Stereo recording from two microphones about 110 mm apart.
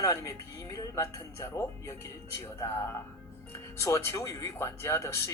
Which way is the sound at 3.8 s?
25° left (ahead or behind).